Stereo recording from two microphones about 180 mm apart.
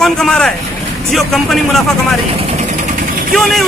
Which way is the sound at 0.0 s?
5° left (ahead or behind).